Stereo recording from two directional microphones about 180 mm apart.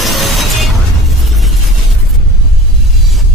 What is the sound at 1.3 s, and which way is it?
Vehicle, centre (ahead or behind).